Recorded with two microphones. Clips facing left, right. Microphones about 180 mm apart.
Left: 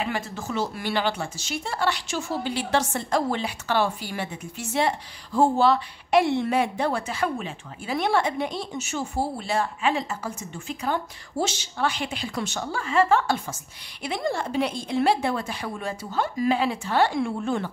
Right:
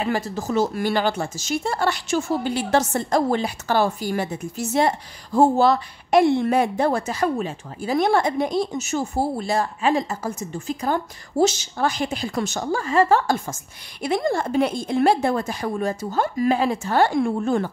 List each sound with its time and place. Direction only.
0.0 s speech: 40° right (ahead or behind)